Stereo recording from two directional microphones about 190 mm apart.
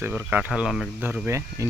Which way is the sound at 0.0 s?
10° right (ahead or behind).